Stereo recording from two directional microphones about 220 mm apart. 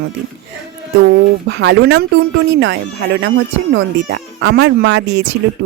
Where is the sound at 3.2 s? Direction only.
55° right (ahead or behind).